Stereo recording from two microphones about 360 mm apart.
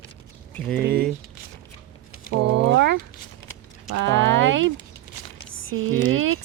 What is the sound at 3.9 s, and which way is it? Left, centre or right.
Clip-clop, right.